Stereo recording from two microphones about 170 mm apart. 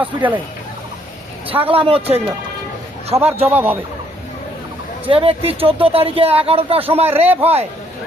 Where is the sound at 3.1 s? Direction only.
15° right (ahead or behind).